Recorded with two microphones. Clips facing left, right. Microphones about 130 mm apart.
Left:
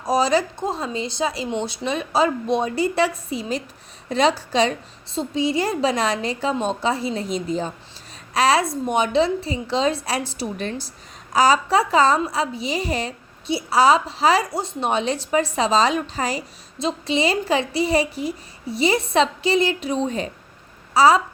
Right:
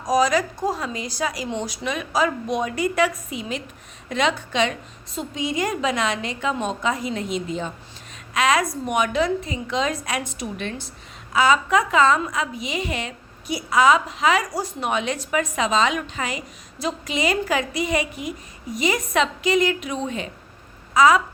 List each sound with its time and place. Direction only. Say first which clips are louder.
0.0 s a woman's voice: even; 30° left (ahead or behind)